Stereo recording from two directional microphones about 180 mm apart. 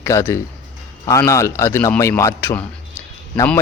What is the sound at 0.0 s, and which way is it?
Speech, 15° left (ahead or behind).